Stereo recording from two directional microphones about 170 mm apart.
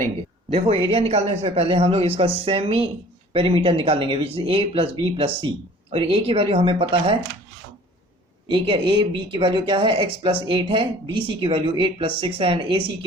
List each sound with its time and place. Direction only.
0.5 s a man's voice: 35° right (ahead or behind)
8.4 s speech: 30° right (ahead or behind)